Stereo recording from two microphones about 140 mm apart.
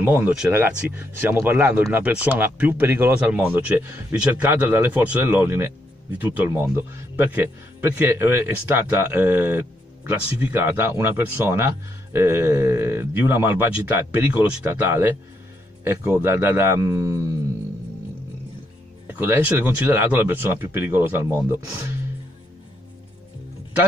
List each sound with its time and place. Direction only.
0.0 s speech: 10° right (ahead or behind)
19.0 s speech: 15° right (ahead or behind)